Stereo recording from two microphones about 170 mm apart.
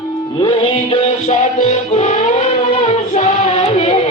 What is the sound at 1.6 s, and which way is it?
Music, 45° left (ahead or behind).